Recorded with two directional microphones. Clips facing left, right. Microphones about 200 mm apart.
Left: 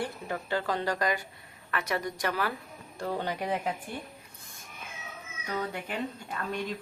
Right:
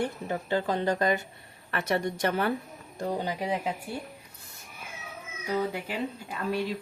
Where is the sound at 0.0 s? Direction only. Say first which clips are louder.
Right 4 dB; 20° right (ahead or behind).